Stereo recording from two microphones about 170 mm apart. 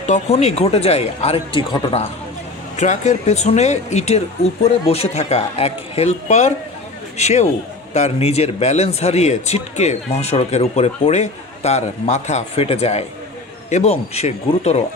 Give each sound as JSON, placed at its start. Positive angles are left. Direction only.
{"t": 0.0, "sound": "a man's voice", "side_deg": 40}
{"t": 2.7, "sound": "a man's voice", "side_deg": 45}